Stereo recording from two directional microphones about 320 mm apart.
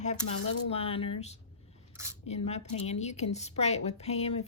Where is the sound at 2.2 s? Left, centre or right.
Centre.